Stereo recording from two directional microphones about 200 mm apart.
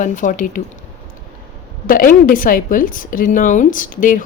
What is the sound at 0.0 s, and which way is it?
Speech, 40° left (ahead or behind).